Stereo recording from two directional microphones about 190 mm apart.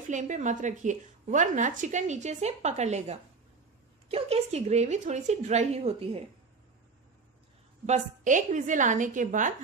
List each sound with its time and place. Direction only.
0.1 s a woman's voice: 40° right (ahead or behind)
7.8 s a woman's voice: 40° right (ahead or behind)